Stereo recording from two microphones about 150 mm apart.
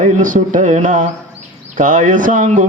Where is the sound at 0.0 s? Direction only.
60° right (ahead or behind).